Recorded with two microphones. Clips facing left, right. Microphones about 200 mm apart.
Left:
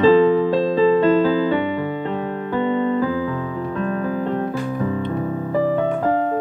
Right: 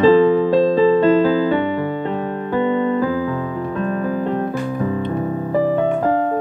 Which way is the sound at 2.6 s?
45° right (ahead or behind).